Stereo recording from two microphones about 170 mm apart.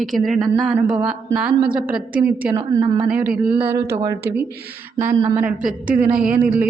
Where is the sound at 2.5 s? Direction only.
25° right (ahead or behind).